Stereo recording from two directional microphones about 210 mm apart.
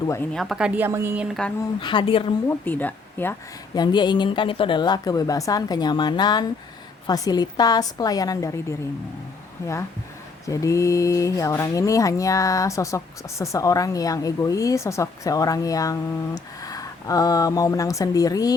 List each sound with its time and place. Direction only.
0.0 s a woman's voice: 15° left (ahead or behind)
0.3 s a woman's voice: centre (ahead or behind)
1.8 s speech: 20° left (ahead or behind)
2.5 s a woman's voice: 10° left (ahead or behind)
3.8 s a woman's voice: 20° left (ahead or behind)